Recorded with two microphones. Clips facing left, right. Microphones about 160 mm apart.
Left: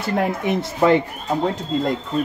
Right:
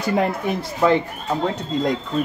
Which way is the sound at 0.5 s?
20° left (ahead or behind).